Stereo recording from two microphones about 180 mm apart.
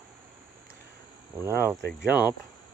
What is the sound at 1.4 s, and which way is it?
Speech, 10° right (ahead or behind).